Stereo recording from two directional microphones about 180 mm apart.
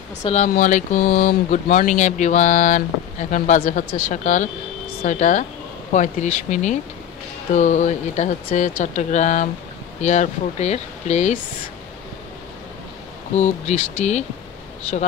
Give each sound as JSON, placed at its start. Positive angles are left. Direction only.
{"t": 0.5, "sound": "speech", "side_deg": 45}
{"t": 13.3, "sound": "speech", "side_deg": 40}